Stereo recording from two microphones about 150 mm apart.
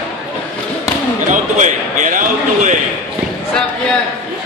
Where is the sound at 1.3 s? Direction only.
55° right (ahead or behind).